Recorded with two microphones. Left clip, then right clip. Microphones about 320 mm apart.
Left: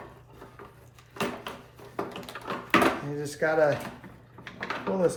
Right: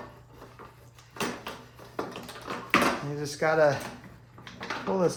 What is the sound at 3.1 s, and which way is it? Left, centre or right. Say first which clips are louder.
Speech: right 2 dB; centre.